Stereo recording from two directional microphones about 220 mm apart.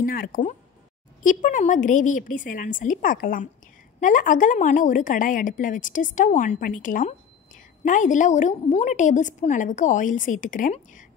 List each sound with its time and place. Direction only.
0.0 s a woman's voice: 40° left (ahead or behind)